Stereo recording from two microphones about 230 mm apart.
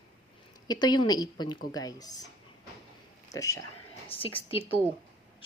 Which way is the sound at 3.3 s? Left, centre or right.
Centre.